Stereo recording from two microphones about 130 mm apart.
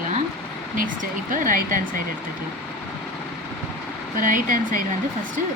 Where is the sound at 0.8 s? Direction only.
90° right.